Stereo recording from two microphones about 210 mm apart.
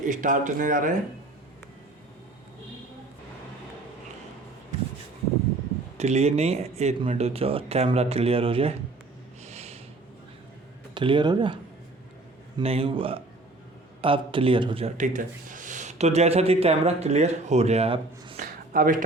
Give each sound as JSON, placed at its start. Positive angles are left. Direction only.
{"t": 0.0, "sound": "speech", "side_deg": -40}
{"t": 6.0, "sound": "speech", "side_deg": -30}
{"t": 9.4, "sound": "snort", "side_deg": -30}
{"t": 10.9, "sound": "speech", "side_deg": -20}
{"t": 18.3, "sound": "a sound", "side_deg": -40}